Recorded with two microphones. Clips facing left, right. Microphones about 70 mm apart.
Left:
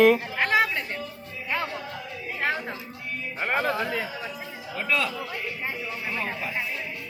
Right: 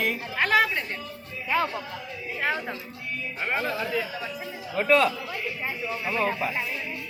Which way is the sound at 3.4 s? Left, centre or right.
Left.